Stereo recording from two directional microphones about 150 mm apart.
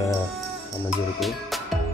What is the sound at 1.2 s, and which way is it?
Music, centre (ahead or behind).